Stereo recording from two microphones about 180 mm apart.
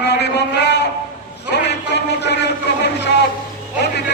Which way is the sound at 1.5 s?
70° left (ahead or behind).